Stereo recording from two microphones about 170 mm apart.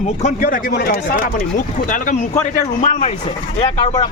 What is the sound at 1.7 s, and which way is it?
Speech, 50° left (ahead or behind).